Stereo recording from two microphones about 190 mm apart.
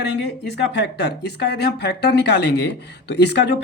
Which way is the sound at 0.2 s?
60° left (ahead or behind).